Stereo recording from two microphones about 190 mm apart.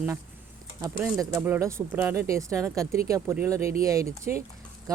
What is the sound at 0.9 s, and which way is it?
Speech, 10° right (ahead or behind).